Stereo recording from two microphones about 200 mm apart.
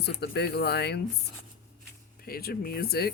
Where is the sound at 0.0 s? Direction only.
55° left (ahead or behind).